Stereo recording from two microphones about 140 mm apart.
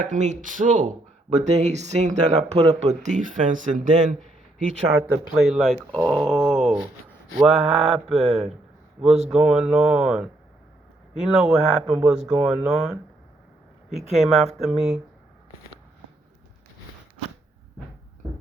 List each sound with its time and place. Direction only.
0.0 s speech: 60° right (ahead or behind)
5.4 s speech: centre (ahead or behind)
5.9 s speech: 10° left (ahead or behind)
6.1 s speech: centre (ahead or behind)
14.2 s speech: centre (ahead or behind)